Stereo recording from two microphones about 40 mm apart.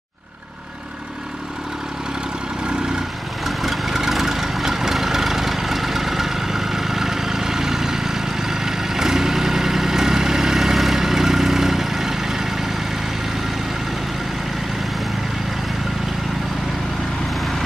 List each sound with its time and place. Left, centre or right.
3.4 s vehicle: centre